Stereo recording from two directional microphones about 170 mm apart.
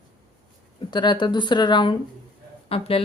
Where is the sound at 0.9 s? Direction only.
25° left (ahead or behind).